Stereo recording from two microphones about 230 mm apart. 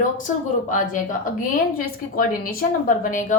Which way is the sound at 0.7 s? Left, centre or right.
Left.